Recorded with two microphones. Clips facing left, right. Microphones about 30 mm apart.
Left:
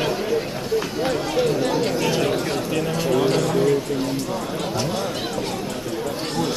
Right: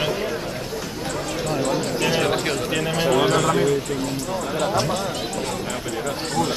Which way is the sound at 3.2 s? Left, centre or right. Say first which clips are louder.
Right 1 dB; centre.